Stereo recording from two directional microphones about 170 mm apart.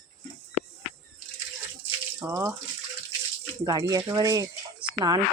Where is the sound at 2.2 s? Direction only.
15° right (ahead or behind).